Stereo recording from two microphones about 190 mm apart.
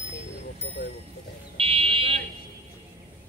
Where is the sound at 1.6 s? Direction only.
30° right (ahead or behind).